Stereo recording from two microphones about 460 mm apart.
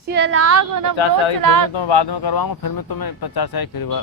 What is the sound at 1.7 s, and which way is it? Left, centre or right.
Speech, left.